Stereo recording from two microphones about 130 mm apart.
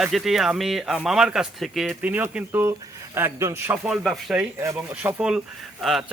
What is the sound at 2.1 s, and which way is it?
Speech, 15° right (ahead or behind).